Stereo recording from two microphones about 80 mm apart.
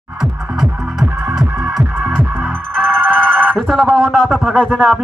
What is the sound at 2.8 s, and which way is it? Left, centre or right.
Music, right.